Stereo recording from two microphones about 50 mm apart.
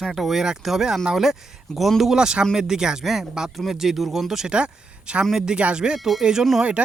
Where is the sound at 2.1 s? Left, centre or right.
Centre.